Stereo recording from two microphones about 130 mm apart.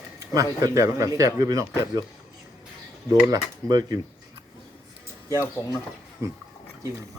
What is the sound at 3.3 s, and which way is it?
Speech, 30° right (ahead or behind).